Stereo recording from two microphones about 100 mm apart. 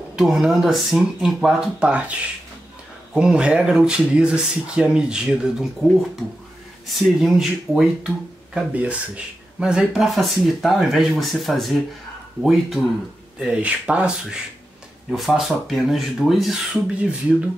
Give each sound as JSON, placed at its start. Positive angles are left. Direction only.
{"t": 0.1, "sound": "speech", "side_deg": -5}
{"t": 3.2, "sound": "speech", "side_deg": -5}
{"t": 7.0, "sound": "speech", "side_deg": 0}